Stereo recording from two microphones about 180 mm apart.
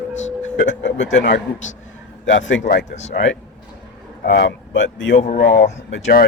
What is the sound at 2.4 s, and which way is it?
Speech, 90° left.